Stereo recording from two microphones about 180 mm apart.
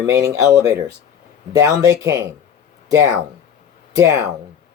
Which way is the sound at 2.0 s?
15° right (ahead or behind).